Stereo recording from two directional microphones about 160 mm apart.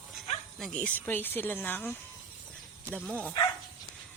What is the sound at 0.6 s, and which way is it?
Speech, 5° left (ahead or behind).